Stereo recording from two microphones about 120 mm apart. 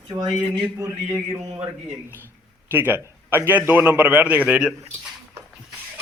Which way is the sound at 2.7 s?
15° right (ahead or behind).